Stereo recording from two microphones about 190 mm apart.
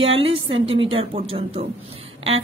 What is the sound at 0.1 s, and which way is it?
A woman's voice, 30° right (ahead or behind).